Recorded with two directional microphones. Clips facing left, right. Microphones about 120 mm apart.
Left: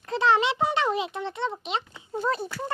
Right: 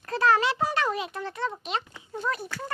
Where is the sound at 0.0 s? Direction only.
20° left (ahead or behind).